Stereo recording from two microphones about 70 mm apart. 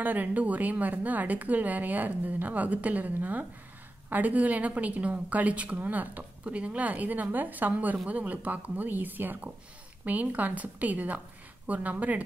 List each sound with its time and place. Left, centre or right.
0.0 s a woman's voice: right